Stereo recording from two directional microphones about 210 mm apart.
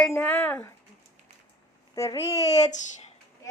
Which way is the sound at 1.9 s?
15° left (ahead or behind).